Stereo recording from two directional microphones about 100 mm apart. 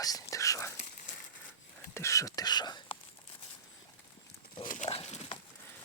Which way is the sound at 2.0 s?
30° left (ahead or behind).